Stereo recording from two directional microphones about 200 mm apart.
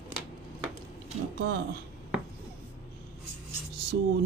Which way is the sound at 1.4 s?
55° right (ahead or behind).